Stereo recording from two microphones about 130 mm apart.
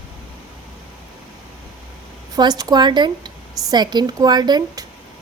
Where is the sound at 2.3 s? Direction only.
30° right (ahead or behind).